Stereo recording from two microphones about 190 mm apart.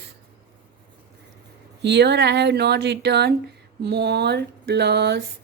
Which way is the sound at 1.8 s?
65° right (ahead or behind).